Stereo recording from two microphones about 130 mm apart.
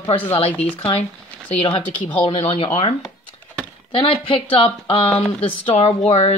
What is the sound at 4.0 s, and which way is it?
A woman's voice, 45° left (ahead or behind).